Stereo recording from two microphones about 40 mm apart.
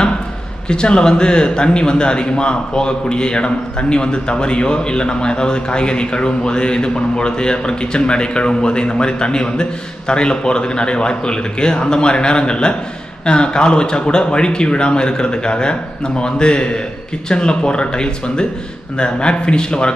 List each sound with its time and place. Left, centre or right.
0.7 s a man's voice: left